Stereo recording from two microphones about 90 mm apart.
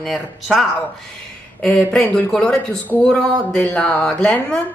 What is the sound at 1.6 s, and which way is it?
Speech, 10° left (ahead or behind).